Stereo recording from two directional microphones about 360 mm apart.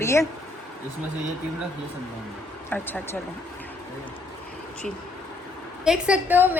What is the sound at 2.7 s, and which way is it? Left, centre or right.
Speech, centre.